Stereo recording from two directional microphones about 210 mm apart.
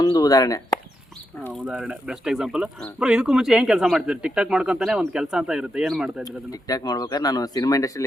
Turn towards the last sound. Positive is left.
turn(degrees=15)  # may be behind; listen again after turning